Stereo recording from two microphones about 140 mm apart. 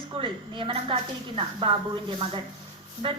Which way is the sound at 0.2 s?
35° right (ahead or behind).